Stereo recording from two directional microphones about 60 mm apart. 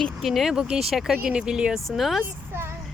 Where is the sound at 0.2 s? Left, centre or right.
Centre.